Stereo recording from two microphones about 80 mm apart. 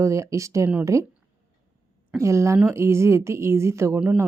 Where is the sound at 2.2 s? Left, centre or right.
Right.